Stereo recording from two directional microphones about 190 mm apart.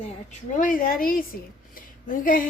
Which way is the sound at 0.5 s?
45° left (ahead or behind).